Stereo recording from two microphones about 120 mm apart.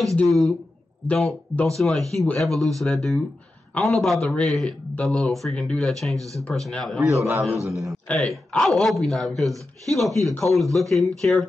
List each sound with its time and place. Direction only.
0.1 s a man's voice: 5° left (ahead or behind)
6.1 s a man's voice: 25° right (ahead or behind)
6.4 s a man's voice: 5° left (ahead or behind)
7.2 s a man's voice: 20° right (ahead or behind)
7.9 s a man's voice: centre (ahead or behind)